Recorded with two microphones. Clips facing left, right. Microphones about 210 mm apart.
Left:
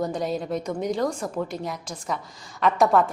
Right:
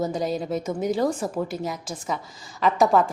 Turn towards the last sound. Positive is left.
turn(degrees=0)  # may be behind; listen again after turning